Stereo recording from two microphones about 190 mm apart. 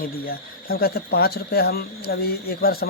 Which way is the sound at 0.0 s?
50° left (ahead or behind).